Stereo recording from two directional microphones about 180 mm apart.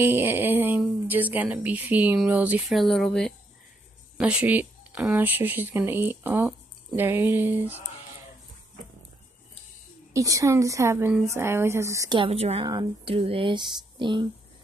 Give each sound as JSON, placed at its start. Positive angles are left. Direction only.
{"t": 0.0, "sound": "a woman's voice", "side_deg": -10}
{"t": 10.1, "sound": "a woman's voice", "side_deg": -15}